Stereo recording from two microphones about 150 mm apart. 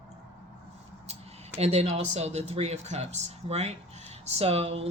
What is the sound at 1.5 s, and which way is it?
Speech, 45° right (ahead or behind).